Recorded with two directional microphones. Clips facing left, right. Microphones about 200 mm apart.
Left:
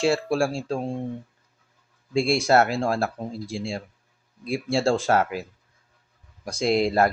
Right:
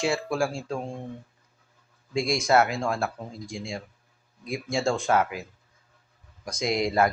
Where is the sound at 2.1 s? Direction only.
30° left (ahead or behind).